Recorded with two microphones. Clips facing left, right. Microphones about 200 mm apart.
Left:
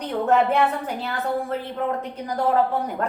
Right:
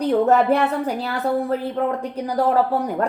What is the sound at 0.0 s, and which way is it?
Speech, 35° right (ahead or behind).